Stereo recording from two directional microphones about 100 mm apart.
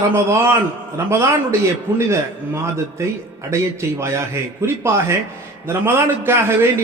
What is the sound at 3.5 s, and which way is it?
A man's voice, 30° right (ahead or behind).